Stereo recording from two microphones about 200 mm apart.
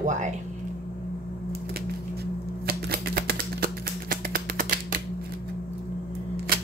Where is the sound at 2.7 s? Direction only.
50° right (ahead or behind).